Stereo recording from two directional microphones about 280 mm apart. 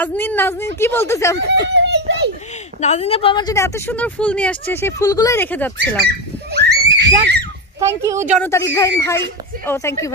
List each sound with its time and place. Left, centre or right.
0.0 s speech: centre
1.7 s a sound: right
2.8 s speech: left; by 6.0 s centre
6.5 s screaming: right
7.8 s speech: centre
8.4 s speech: centre